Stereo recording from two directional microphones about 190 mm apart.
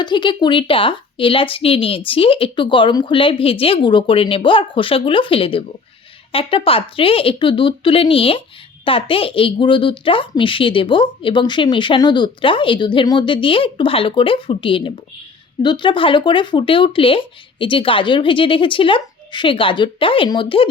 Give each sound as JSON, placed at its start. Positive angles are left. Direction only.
{"t": 0.0, "sound": "a woman's voice", "side_deg": 25}